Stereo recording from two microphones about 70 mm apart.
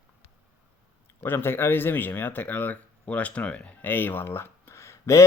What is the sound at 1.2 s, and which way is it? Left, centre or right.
Speech, left.